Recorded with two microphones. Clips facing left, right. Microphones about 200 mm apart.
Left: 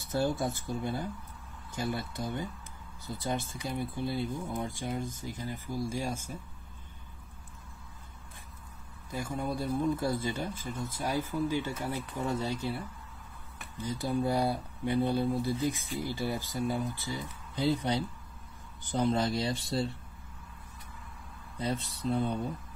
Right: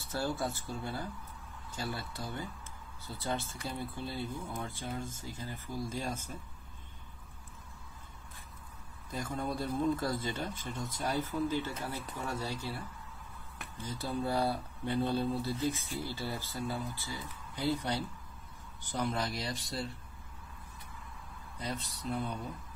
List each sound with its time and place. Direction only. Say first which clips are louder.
0.1 s speech: left 5 dB; 20° left (ahead or behind)
9.1 s speech: left 2 dB; 10° left (ahead or behind); by 19.9 s 25° left (ahead or behind)
21.5 s speech: left 6 dB; 25° left (ahead or behind)